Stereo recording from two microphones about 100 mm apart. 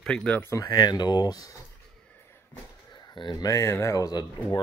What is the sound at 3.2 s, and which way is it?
Speech, 45° left (ahead or behind).